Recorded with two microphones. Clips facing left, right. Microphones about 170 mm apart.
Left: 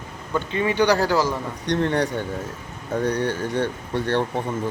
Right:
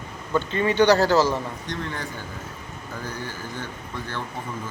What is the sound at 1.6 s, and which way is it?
Speech, 70° left (ahead or behind).